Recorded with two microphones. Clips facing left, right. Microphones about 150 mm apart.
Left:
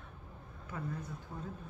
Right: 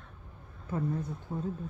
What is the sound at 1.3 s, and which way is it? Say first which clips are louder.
Speech: right 10 dB; 35° right (ahead or behind).